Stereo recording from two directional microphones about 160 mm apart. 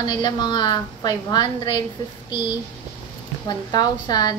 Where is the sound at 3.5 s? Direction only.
25° left (ahead or behind).